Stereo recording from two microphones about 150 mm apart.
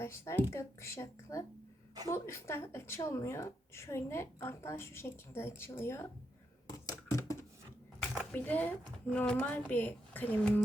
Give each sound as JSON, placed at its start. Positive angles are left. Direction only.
{"t": 0.0, "sound": "a woman's voice", "side_deg": 15}
{"t": 6.7, "sound": "a sound", "side_deg": 25}
{"t": 8.3, "sound": "speech", "side_deg": 10}